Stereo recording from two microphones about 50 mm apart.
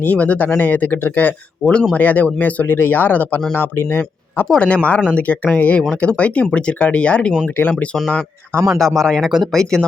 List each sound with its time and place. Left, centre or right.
0.0 s speech: left
2.6 s speech: left
3.5 s speech: left
4.6 s speech: left
7.4 s speech: left
8.5 s a man's voice: right
9.0 s speech: centre